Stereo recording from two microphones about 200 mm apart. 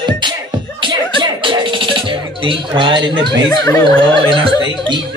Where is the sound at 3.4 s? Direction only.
20° left (ahead or behind).